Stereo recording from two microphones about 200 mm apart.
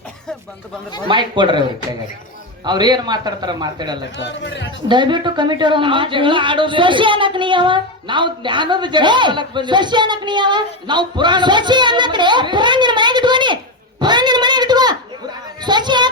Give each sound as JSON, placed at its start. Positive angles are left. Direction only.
{"t": 1.0, "sound": "a woman's voice", "side_deg": -25}
{"t": 2.6, "sound": "a woman's voice", "side_deg": -20}
{"t": 4.2, "sound": "speech", "side_deg": 60}
{"t": 4.9, "sound": "a woman's voice", "side_deg": -25}
{"t": 14.0, "sound": "a sound", "side_deg": -20}